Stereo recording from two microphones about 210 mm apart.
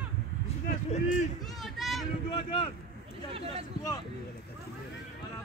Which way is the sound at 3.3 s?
25° right (ahead or behind).